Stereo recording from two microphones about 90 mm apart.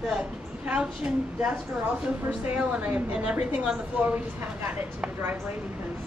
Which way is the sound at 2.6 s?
15° right (ahead or behind).